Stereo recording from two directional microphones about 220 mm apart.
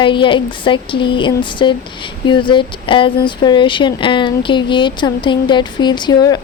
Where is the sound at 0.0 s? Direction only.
20° left (ahead or behind).